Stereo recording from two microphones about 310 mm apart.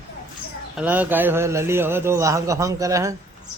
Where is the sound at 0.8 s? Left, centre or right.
Centre.